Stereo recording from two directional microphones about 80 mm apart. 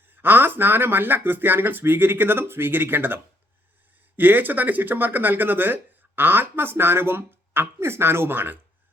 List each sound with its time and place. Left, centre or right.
0.1 s speech: right
4.2 s speech: right